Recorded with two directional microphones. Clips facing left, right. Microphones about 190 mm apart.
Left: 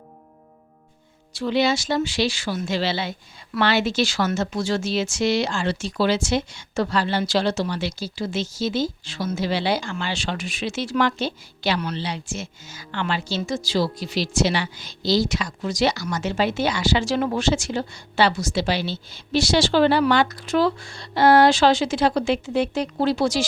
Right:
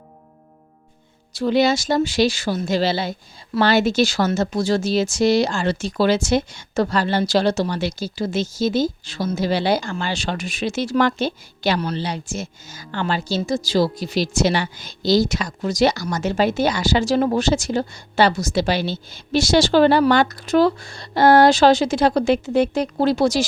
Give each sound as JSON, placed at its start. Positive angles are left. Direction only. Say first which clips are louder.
{"t": 1.4, "sound": "speech", "louder": "right 4 dB", "side_deg": -45}